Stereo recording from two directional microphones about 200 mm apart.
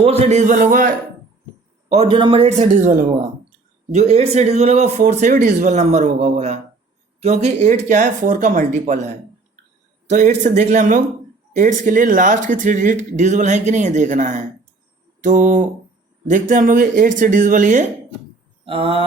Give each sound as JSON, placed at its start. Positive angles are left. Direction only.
{"t": 0.0, "sound": "speech", "side_deg": -30}
{"t": 1.9, "sound": "speech", "side_deg": -30}
{"t": 3.9, "sound": "speech", "side_deg": -35}
{"t": 10.1, "sound": "speech", "side_deg": -35}
{"t": 18.6, "sound": "speech", "side_deg": -25}